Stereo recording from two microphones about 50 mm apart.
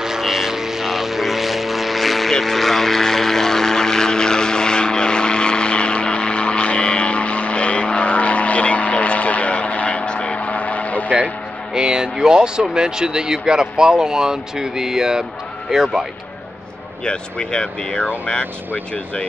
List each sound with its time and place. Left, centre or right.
0.0 s vehicle: centre; by 11.1 s left
11.7 s speech: centre
17.0 s speech: centre